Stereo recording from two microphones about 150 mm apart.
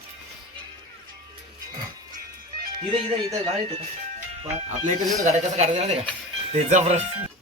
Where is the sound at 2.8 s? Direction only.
40° right (ahead or behind).